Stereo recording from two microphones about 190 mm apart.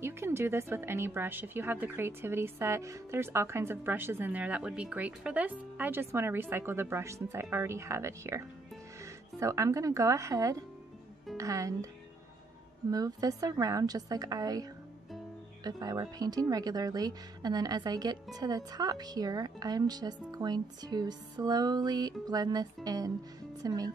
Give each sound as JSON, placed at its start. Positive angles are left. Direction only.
{"t": 0.0, "sound": "a woman's voice", "side_deg": -15}
{"t": 12.9, "sound": "speech", "side_deg": -20}